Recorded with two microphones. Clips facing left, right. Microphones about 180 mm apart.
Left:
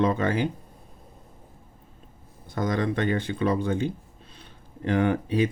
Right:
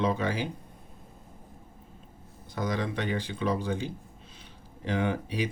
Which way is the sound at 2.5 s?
55° left (ahead or behind).